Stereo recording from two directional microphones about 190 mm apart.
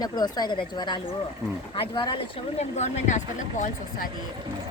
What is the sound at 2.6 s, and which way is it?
Speech, 35° left (ahead or behind).